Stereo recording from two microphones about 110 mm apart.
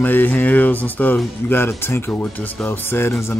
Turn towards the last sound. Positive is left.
turn(degrees=25)  # may be behind; listen again after turning